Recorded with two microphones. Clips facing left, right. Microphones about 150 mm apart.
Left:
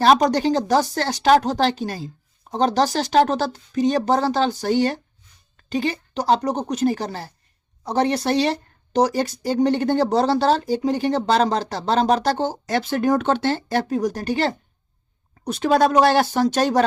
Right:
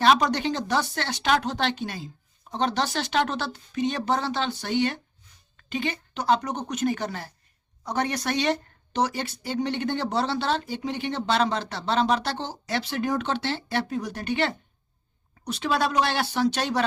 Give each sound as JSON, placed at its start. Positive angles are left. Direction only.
{"t": 0.0, "sound": "speech", "side_deg": 40}
{"t": 15.4, "sound": "speech", "side_deg": 50}